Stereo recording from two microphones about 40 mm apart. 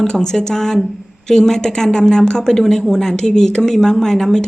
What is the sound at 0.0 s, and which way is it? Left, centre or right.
Speech, centre.